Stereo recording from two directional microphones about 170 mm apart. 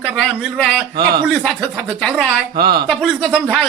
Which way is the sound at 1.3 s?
Centre (ahead or behind).